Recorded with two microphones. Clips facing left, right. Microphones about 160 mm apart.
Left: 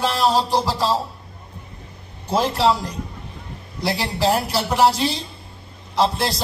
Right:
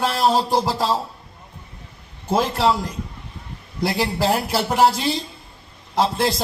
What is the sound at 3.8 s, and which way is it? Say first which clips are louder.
A man's voice: even; 50° right (ahead or behind).